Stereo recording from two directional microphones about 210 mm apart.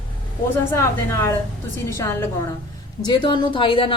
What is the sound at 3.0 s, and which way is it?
Speech, 25° left (ahead or behind).